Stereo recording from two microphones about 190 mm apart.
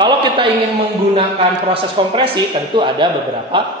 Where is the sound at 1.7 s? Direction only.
30° right (ahead or behind).